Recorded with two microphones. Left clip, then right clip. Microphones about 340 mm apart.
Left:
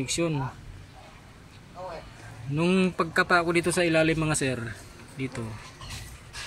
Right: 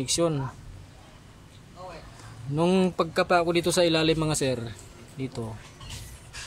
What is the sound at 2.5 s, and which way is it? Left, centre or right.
Speech, centre.